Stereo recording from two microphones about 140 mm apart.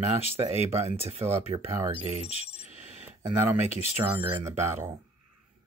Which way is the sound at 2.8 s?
55° right (ahead or behind).